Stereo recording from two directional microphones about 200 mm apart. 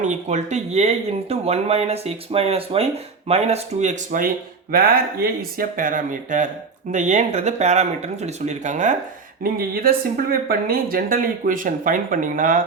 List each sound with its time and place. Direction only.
0.0 s speech: 35° right (ahead or behind)
9.4 s speech: 45° right (ahead or behind)